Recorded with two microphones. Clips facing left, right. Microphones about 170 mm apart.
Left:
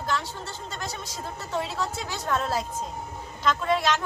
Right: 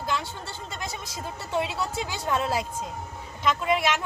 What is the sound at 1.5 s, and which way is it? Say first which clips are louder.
Speech: right 2 dB; 10° right (ahead or behind).